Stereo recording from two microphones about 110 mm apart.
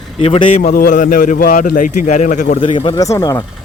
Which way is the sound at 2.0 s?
90° left.